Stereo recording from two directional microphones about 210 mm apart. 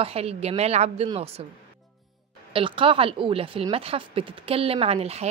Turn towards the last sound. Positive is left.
turn(degrees=-30)  # may be behind; listen again after turning